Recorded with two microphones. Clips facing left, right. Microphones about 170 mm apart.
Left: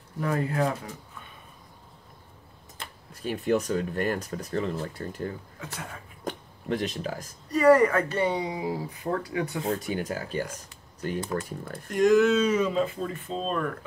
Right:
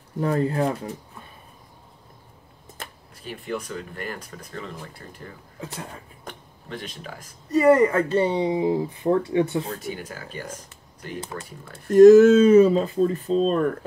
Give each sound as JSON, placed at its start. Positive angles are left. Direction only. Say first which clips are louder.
{"t": 0.2, "sound": "speech", "louder": "right 4 dB", "side_deg": -30}
{"t": 3.2, "sound": "speech", "louder": "left 6 dB", "side_deg": 45}
{"t": 6.2, "sound": "speech", "louder": "left 12 dB", "side_deg": 40}
{"t": 7.5, "sound": "speech", "louder": "right 2 dB", "side_deg": -20}
{"t": 10.0, "sound": "speech", "louder": "left 5 dB", "side_deg": 40}
{"t": 11.9, "sound": "speech", "louder": "right 10 dB", "side_deg": -40}